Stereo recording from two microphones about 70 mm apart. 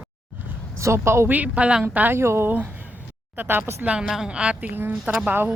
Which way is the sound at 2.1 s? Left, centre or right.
Right.